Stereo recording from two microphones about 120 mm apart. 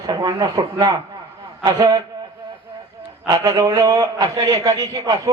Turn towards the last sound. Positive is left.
turn(degrees=-30)  # may be behind; listen again after turning